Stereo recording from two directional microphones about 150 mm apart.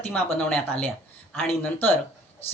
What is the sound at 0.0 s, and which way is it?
Speech, 10° left (ahead or behind).